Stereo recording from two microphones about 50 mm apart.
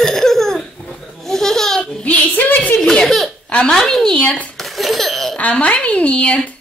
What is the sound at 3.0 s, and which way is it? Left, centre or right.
A woman's voice, centre.